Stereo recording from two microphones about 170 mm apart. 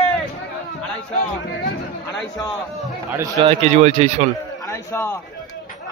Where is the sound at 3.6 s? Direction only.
40° right (ahead or behind).